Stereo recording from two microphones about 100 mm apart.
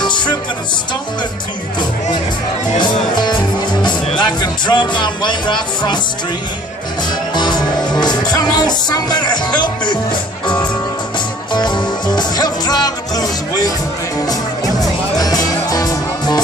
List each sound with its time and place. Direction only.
0.0 s music: 50° left (ahead or behind)
2.8 s speech: 50° left (ahead or behind)
7.3 s music: 45° left (ahead or behind)